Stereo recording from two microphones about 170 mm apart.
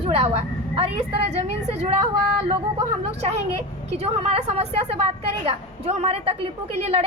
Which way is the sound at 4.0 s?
35° right (ahead or behind).